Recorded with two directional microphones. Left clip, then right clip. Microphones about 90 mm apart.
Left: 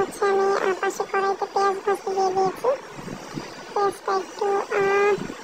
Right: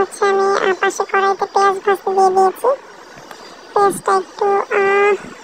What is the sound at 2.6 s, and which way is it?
Speech, 60° right (ahead or behind).